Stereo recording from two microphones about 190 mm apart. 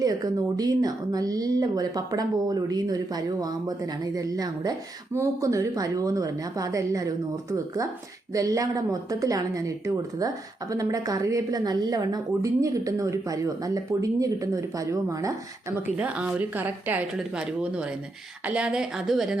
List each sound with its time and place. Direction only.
0.0 s speech: 20° right (ahead or behind)
5.1 s a woman's voice: 15° right (ahead or behind)
8.3 s a woman's voice: 15° right (ahead or behind)
16.0 s a woman's voice: 5° right (ahead or behind)